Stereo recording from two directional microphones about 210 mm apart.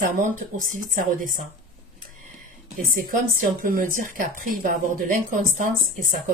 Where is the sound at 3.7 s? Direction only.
40° right (ahead or behind).